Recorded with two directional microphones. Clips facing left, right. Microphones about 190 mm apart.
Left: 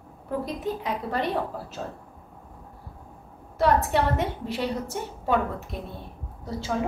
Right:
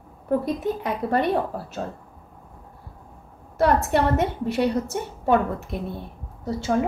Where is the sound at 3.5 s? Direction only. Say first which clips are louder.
Right 2 dB; 55° right (ahead or behind).